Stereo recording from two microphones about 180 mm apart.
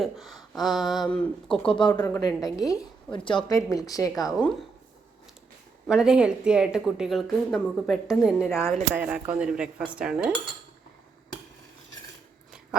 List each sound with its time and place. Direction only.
0.0 s a woman's voice: centre (ahead or behind)
1.6 s a woman's voice: 25° left (ahead or behind)
4.1 s a woman's voice: centre (ahead or behind)
5.9 s a woman's voice: 5° right (ahead or behind)
8.4 s a woman's voice: 15° left (ahead or behind)
8.7 s a woman's voice: 5° right (ahead or behind)